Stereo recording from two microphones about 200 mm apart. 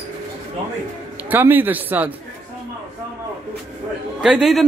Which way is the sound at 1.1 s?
10° right (ahead or behind).